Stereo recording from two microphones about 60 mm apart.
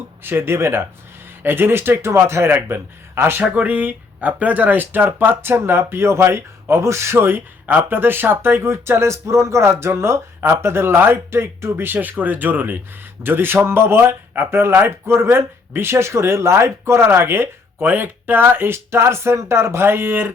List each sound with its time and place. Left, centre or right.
0.2 s speech: right
2.5 s speech: right
3.4 s speech: right